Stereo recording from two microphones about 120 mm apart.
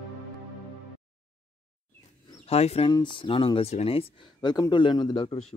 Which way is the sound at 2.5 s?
60° left (ahead or behind).